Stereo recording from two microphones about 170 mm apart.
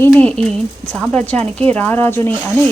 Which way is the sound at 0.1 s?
5° left (ahead or behind).